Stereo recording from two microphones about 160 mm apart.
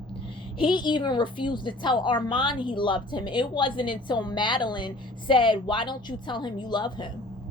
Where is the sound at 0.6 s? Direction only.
30° left (ahead or behind).